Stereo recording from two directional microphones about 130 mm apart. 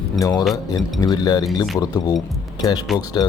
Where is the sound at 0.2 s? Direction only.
30° left (ahead or behind).